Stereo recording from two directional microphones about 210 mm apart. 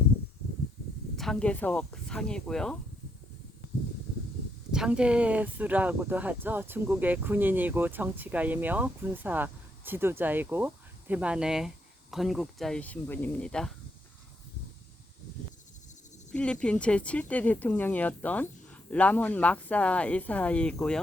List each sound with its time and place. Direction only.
1.1 s speech: centre (ahead or behind)
4.7 s speech: 5° right (ahead or behind)
16.3 s speech: 5° left (ahead or behind)